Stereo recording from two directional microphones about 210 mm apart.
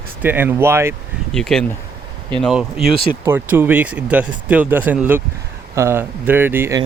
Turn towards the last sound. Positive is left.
turn(degrees=-10)  # may be behind; listen again after turning